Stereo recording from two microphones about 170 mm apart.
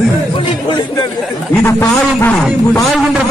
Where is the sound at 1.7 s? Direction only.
15° left (ahead or behind).